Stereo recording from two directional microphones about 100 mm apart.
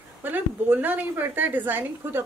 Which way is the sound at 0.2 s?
20° right (ahead or behind).